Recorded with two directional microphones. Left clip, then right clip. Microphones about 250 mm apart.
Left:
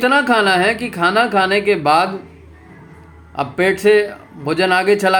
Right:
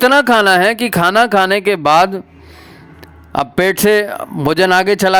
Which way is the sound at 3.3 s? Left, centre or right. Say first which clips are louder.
Right 3 dB; right.